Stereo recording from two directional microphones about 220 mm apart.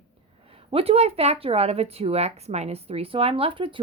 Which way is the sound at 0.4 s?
25° right (ahead or behind).